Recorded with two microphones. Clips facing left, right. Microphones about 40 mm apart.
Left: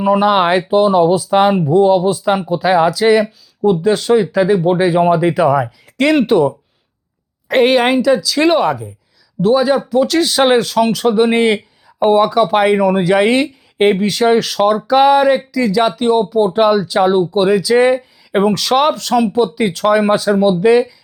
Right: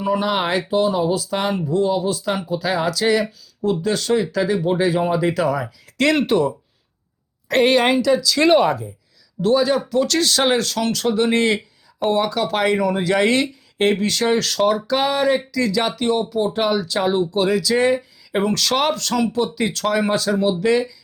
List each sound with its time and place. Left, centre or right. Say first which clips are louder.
0.0 s speech: left 8 dB; left
5.6 s speech: left 4 dB; centre
9.6 s speech: left 5 dB; centre